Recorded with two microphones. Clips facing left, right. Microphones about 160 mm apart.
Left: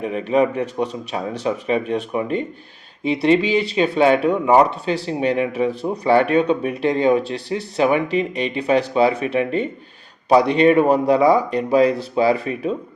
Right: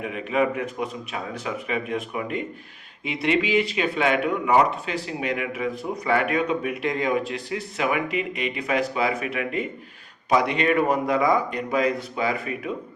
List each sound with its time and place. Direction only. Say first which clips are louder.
0.0 s speech: left 6 dB; 30° left (ahead or behind)